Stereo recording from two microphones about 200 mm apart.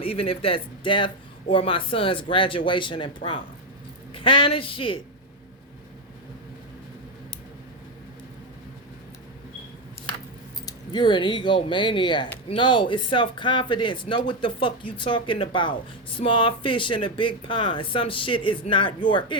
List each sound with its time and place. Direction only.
0.0 s speech: 30° left (ahead or behind)
4.1 s speech: 25° left (ahead or behind)
10.7 s speech: 20° left (ahead or behind)